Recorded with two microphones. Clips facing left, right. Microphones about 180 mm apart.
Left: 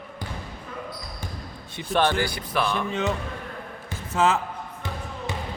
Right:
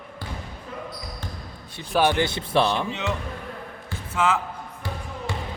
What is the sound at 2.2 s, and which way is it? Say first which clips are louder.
Speech: right 4 dB; 25° right (ahead or behind).